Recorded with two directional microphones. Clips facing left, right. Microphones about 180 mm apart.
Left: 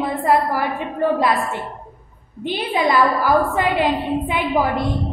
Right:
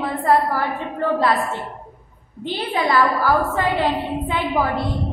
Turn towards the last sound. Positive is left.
turn(degrees=15)  # may be behind; listen again after turning